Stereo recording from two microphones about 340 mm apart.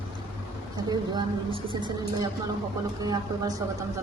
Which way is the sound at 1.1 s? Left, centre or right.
Centre.